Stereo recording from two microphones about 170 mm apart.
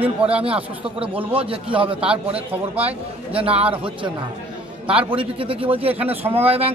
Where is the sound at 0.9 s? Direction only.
30° right (ahead or behind).